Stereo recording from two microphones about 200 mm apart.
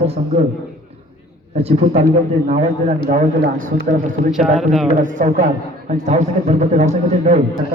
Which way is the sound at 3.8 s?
40° right (ahead or behind).